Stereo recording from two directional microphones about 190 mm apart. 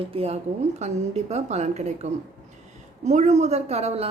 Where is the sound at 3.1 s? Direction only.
35° right (ahead or behind).